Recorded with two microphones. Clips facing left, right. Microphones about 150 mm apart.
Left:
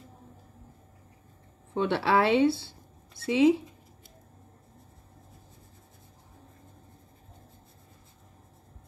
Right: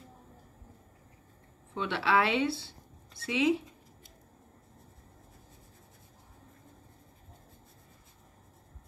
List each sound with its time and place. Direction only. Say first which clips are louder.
1.7 s speech: left 4 dB; 40° left (ahead or behind)